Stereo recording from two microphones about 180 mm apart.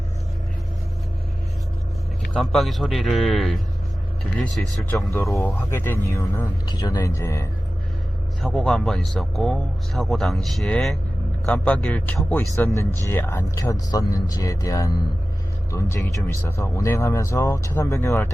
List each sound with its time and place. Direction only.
2.3 s speech: centre (ahead or behind)
5.1 s speech: 15° left (ahead or behind)
8.4 s speech: 5° left (ahead or behind)